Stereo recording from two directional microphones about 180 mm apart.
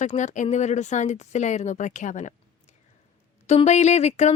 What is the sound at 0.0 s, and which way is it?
Speech, 40° left (ahead or behind).